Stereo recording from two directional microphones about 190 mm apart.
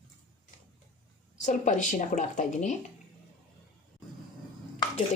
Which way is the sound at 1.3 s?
40° left (ahead or behind).